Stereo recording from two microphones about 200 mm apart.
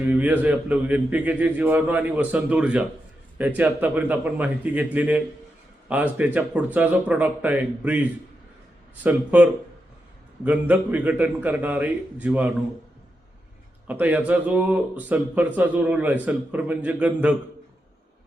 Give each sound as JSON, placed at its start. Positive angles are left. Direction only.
{"t": 0.0, "sound": "speech", "side_deg": -10}
{"t": 9.0, "sound": "speech", "side_deg": -5}
{"t": 13.8, "sound": "speech", "side_deg": -10}